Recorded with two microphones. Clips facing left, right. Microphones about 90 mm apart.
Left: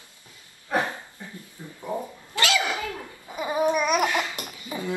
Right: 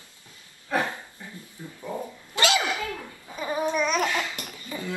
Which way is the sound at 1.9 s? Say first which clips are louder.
Left 3 dB; 20° left (ahead or behind).